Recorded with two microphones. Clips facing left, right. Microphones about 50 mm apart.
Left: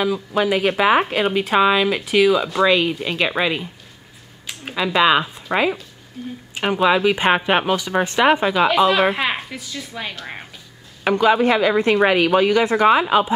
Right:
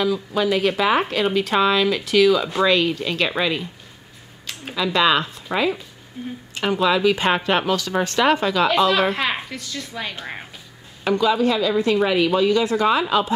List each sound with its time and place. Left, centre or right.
0.0 s speech: centre
6.2 s speech: centre
6.5 s speech: centre
11.1 s speech: left
13.0 s speech: centre